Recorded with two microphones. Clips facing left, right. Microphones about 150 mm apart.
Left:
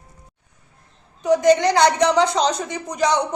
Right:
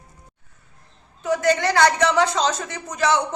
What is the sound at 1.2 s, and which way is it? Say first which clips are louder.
A man's voice: left 5 dB; 15° left (ahead or behind).